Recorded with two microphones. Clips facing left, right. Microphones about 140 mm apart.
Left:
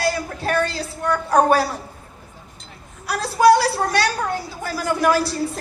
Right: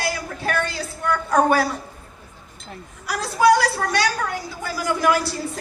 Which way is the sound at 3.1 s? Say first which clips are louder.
Left 2 dB; 35° left (ahead or behind).